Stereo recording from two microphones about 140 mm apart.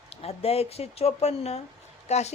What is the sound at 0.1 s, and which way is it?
Speech, 45° left (ahead or behind).